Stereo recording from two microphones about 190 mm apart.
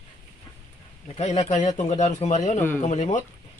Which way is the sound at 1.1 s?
35° left (ahead or behind).